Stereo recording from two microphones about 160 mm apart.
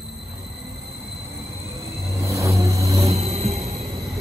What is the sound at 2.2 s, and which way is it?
Vehicle, 20° right (ahead or behind).